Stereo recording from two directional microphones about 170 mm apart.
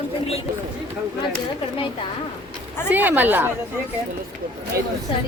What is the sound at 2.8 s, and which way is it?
Speech, 10° right (ahead or behind).